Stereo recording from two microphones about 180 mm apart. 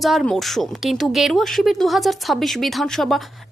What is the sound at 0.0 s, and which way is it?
Speech, centre (ahead or behind).